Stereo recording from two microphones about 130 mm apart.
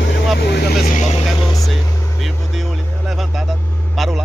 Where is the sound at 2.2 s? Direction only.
Centre (ahead or behind).